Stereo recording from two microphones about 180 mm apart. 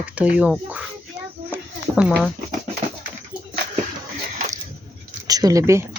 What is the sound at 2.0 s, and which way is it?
Speech, centre (ahead or behind).